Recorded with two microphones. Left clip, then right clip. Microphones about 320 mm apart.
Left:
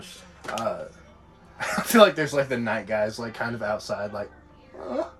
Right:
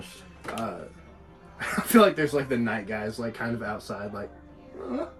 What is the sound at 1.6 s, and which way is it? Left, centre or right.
Speech, left.